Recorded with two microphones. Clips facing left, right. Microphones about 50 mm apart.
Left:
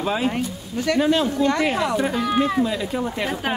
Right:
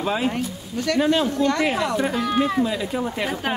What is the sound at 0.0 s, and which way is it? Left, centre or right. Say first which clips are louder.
Speech: left 1 dB; centre.